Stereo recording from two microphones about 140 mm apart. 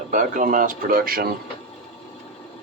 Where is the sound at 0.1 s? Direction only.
70° right (ahead or behind); by 1.3 s 90° right.